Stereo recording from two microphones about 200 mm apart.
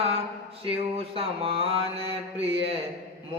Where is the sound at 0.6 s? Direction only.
30° right (ahead or behind).